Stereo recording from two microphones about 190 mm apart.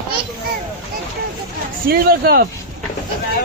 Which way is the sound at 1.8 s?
50° right (ahead or behind).